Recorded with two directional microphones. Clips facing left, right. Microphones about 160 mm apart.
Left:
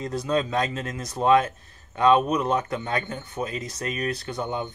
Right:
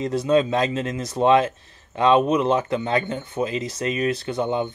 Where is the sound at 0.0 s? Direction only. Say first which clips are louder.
Right 6 dB; 25° right (ahead or behind).